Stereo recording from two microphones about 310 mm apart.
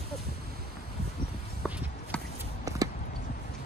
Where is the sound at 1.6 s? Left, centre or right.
Centre.